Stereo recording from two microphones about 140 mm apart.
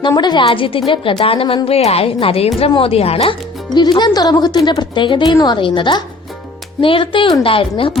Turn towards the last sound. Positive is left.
turn(degrees=40)  # may be behind; listen again after turning